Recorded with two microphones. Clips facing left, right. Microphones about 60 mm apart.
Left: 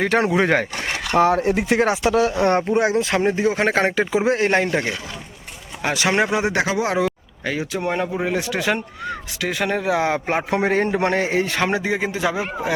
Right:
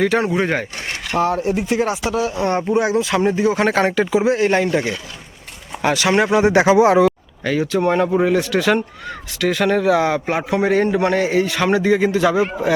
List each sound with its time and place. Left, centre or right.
0.3 s speech: left
1.1 s speech: left
2.3 s speech: left
3.0 s speech: left
4.7 s a man's voice: left
6.5 s speech: right
6.8 s speech: centre
7.4 s a man's voice: centre
7.8 s speech: centre
8.2 s speech: centre
11.6 s a man's voice: centre